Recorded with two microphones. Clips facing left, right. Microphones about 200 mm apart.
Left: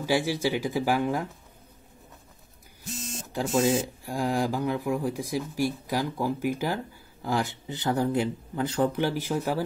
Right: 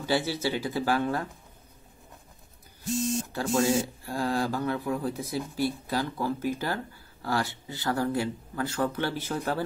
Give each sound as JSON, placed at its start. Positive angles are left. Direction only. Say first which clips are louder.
{"t": 0.0, "sound": "speech", "louder": "left 2 dB", "side_deg": 10}
{"t": 3.5, "sound": "speech", "louder": "left 1 dB", "side_deg": 20}